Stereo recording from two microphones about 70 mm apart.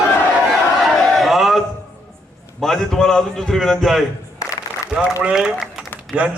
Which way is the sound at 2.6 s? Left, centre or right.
Centre.